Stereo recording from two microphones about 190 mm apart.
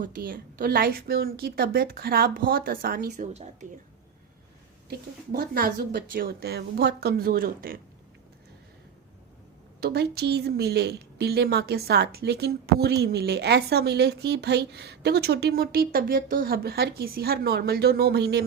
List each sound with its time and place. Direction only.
0.0 s a woman's voice: 50° right (ahead or behind)
4.9 s a woman's voice: 50° right (ahead or behind)
9.8 s a woman's voice: 55° right (ahead or behind)